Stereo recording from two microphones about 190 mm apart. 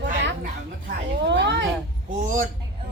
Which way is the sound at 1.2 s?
70° right (ahead or behind).